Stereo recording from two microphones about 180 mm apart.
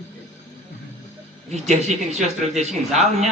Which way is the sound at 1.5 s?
40° right (ahead or behind).